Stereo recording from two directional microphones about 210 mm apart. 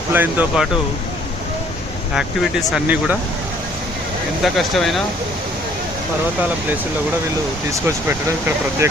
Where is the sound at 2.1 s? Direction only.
Centre (ahead or behind).